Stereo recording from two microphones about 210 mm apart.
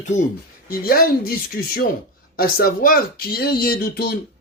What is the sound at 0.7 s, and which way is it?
Speech, 45° left (ahead or behind).